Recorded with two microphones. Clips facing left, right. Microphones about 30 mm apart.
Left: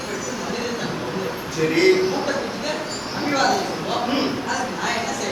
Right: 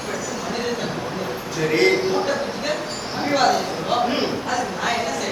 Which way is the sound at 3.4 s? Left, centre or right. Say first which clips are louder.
Right 1 dB; centre.